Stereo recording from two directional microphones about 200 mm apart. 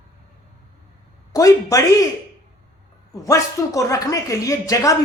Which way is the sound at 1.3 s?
15° left (ahead or behind).